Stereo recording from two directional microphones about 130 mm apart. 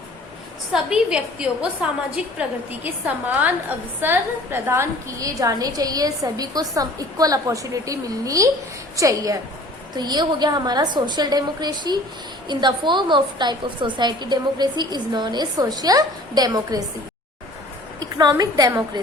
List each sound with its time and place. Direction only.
0.7 s a woman's voice: 5° right (ahead or behind); by 16.8 s 30° right (ahead or behind)
18.2 s a woman's voice: 30° right (ahead or behind)